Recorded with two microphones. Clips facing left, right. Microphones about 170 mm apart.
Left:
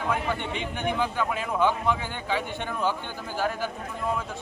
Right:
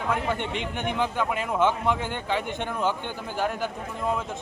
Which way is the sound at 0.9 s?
15° right (ahead or behind).